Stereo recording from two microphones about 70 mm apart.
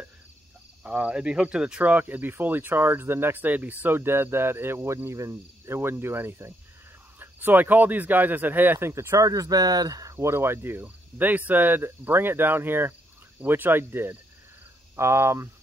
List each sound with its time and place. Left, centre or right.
0.8 s speech: centre
8.7 s speech: right
10.1 s speech: right